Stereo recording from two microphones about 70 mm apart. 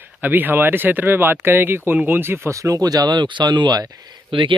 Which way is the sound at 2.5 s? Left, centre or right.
Right.